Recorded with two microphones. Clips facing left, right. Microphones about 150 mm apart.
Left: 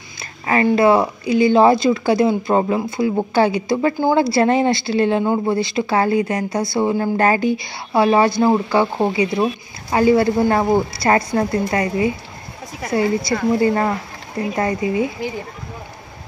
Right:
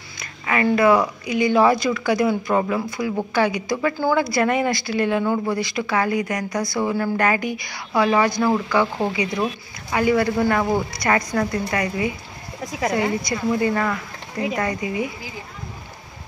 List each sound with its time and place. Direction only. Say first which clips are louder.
0.2 s a sound: left 4 dB; 30° left (ahead or behind)
0.7 s speech: left 2 dB; 30° left (ahead or behind)
13.5 s speech: left 4 dB; 30° left (ahead or behind)